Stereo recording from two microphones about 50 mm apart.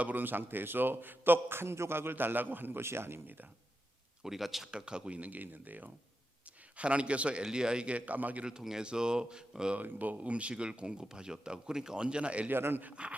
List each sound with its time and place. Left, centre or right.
0.0 s a man's voice: right
2.8 s a man's voice: right
4.2 s speech: centre
4.7 s speech: centre; by 5.9 s right
6.7 s speech: right
8.6 s speech: centre
9.7 s speech: right
12.5 s a man's voice: right
12.8 s speech: right